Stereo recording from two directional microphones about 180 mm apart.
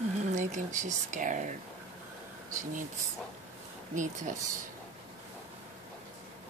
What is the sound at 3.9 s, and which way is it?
Speech, 45° right (ahead or behind).